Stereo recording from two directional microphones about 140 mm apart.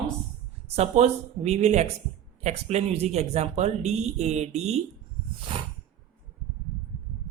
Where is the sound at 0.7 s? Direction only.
50° right (ahead or behind).